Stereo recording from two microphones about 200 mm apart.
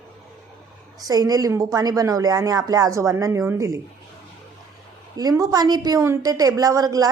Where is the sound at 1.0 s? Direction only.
20° right (ahead or behind).